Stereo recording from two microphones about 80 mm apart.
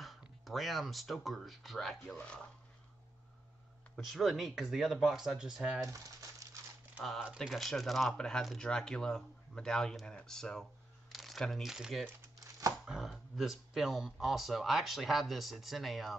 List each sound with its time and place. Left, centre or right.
0.5 s speech: centre
2.1 s speech: centre
3.9 s speech: centre
5.9 s speech: right
7.3 s speech: centre